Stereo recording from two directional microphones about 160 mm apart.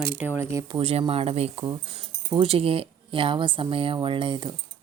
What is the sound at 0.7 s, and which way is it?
Speech, 35° right (ahead or behind).